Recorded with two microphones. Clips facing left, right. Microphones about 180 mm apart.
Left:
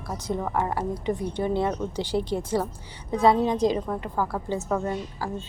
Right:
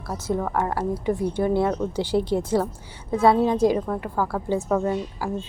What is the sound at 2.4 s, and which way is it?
Speech, 10° left (ahead or behind).